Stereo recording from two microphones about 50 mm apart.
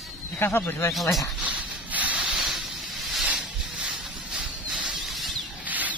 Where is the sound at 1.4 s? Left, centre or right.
Right.